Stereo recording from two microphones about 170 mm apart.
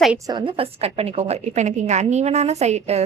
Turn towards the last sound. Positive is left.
turn(degrees=-40)  # may be behind; listen again after turning